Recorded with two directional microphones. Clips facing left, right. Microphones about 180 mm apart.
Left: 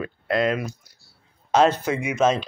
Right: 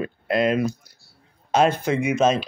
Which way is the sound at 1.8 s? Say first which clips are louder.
Right 2 dB; 25° right (ahead or behind).